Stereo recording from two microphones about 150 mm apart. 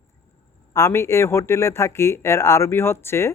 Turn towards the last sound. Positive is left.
turn(degrees=15)  # may be behind; listen again after turning